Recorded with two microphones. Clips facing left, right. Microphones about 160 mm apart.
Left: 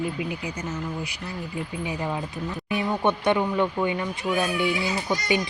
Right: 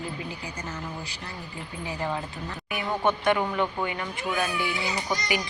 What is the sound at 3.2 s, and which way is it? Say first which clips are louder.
Speech: left 3 dB; 20° left (ahead or behind).